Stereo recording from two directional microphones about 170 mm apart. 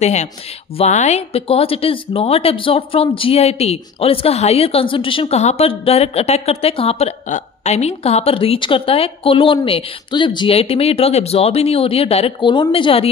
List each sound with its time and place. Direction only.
0.0 s speech: 40° left (ahead or behind)